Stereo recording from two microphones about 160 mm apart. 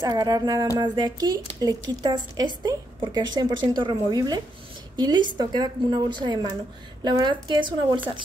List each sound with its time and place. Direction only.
0.0 s speech: 25° right (ahead or behind)